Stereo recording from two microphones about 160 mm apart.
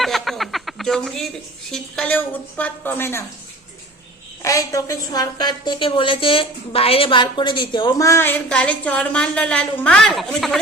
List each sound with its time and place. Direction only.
0.0 s chuckle: centre (ahead or behind)
1.7 s a woman's voice: 5° left (ahead or behind)
4.4 s a woman's voice: 20° left (ahead or behind); by 10.6 s centre (ahead or behind)